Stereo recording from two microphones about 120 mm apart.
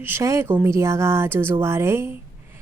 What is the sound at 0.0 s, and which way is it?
A woman's voice, 20° right (ahead or behind).